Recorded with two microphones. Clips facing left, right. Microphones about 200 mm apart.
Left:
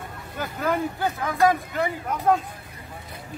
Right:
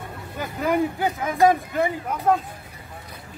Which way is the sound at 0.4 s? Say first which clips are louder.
Right 3 dB; 15° right (ahead or behind).